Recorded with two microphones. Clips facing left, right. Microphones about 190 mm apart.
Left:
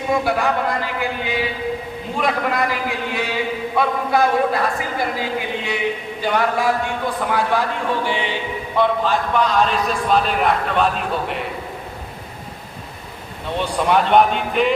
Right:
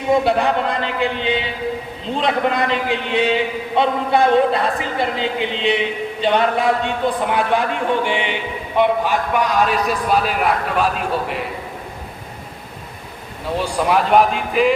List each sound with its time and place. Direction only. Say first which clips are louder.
0.1 s a man's voice: right 4 dB; 25° right (ahead or behind); by 11.4 s centre (ahead or behind)
13.6 s a man's voice: even; 5° right (ahead or behind)